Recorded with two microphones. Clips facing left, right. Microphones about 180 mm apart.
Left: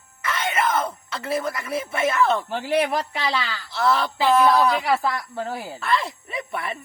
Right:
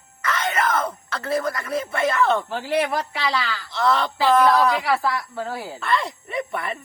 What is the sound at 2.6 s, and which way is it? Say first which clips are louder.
Speech: left 2 dB; 20° left (ahead or behind).